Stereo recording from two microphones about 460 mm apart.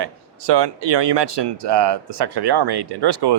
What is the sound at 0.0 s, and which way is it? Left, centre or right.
Speech, right.